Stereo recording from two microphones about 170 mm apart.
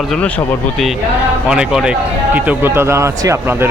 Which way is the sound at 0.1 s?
5° left (ahead or behind).